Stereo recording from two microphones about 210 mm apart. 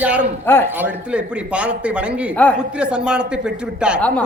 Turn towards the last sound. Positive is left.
turn(degrees=-5)  # may be behind; listen again after turning